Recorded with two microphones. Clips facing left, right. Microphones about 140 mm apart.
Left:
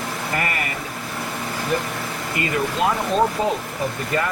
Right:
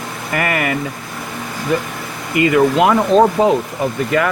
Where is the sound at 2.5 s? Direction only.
80° right.